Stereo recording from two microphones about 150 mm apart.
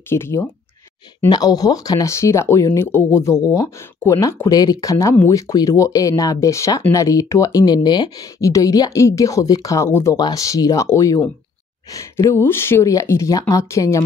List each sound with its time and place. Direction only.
0.1 s speech: 15° left (ahead or behind)